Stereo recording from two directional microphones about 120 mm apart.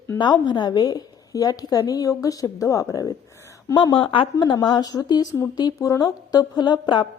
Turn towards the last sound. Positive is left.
turn(degrees=40)  # may be behind; listen again after turning